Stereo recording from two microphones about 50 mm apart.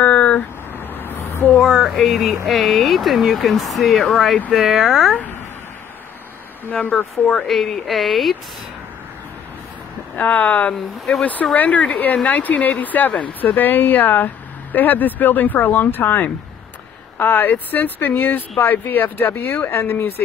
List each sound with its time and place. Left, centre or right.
0.0 s vehicle: left
0.9 s a sound: left
1.6 s speech: centre
6.7 s speech: left
7.3 s speech: centre
10.1 s speech: left
10.7 s speech: centre
11.5 s speech: left